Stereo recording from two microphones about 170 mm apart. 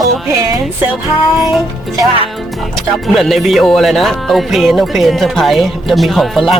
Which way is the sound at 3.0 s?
Centre (ahead or behind).